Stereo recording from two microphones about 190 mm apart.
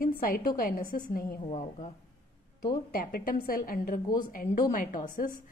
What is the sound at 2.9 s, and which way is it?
A woman's voice, 50° left (ahead or behind).